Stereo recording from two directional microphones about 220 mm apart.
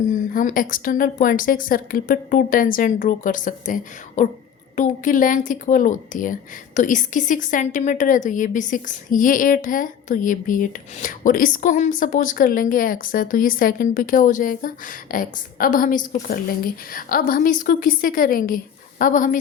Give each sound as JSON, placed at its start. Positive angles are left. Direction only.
{"t": 0.1, "sound": "a woman's voice", "side_deg": 35}